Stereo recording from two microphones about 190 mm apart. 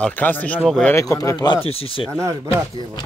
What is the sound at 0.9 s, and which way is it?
Speech, 15° left (ahead or behind).